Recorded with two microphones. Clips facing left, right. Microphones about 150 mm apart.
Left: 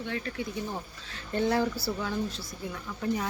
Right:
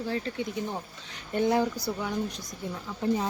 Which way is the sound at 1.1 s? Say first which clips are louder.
Right 2 dB; 15° right (ahead or behind).